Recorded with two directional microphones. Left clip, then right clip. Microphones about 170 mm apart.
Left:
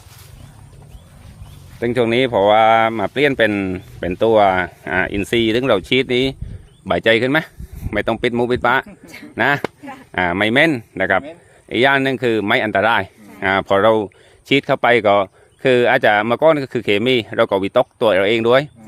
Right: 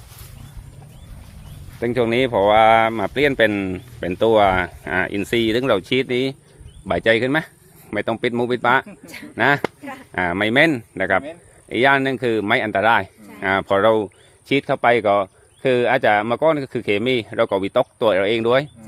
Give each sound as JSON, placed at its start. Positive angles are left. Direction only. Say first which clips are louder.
{"t": 1.8, "sound": "speech", "louder": "left 2 dB", "side_deg": 30}
{"t": 9.0, "sound": "speech", "louder": "even", "side_deg": -10}
{"t": 9.3, "sound": "speech", "louder": "left 1 dB", "side_deg": 35}
{"t": 14.5, "sound": "speech", "louder": "left 3 dB", "side_deg": 40}